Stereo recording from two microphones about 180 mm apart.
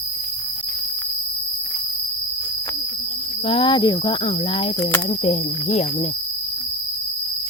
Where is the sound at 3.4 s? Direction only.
25° left (ahead or behind).